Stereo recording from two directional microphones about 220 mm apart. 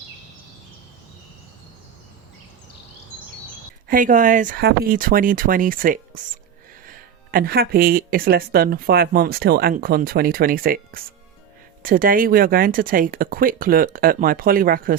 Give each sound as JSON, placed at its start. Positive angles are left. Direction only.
{"t": 3.8, "sound": "speech", "side_deg": -40}